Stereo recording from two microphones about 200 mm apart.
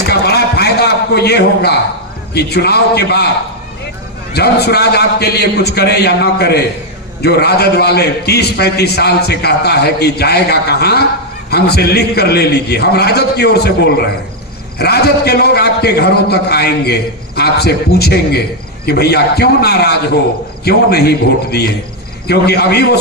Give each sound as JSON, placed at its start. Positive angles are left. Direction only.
{"t": 0.1, "sound": "a sound", "side_deg": 55}
{"t": 2.3, "sound": "a man's voice", "side_deg": 55}
{"t": 4.4, "sound": "a man's voice", "side_deg": 55}